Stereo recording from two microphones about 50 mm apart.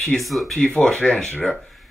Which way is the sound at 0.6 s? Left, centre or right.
Centre.